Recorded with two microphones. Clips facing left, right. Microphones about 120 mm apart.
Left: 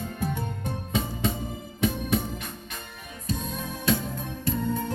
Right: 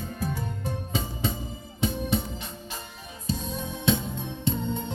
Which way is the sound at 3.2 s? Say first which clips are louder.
Right 1 dB; 30° right (ahead or behind).